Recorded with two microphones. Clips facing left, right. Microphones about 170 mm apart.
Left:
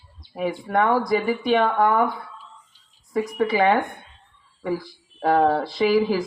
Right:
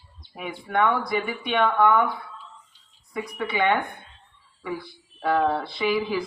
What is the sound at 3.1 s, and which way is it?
Speech, 45° left (ahead or behind).